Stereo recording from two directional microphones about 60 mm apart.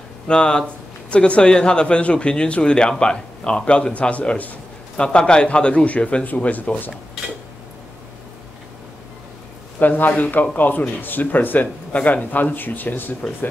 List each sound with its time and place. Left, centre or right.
0.3 s a man's voice: centre
9.8 s speech: left